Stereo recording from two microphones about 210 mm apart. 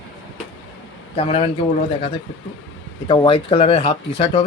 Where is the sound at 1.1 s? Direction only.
25° left (ahead or behind).